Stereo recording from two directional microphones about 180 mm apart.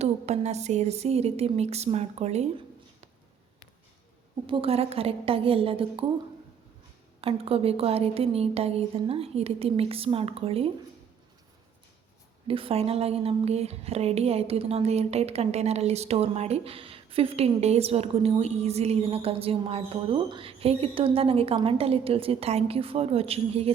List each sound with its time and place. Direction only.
0.0 s a woman's voice: 40° right (ahead or behind)
4.4 s a woman's voice: 30° right (ahead or behind)
7.2 s a woman's voice: 30° right (ahead or behind)
12.5 s a woman's voice: 30° right (ahead or behind)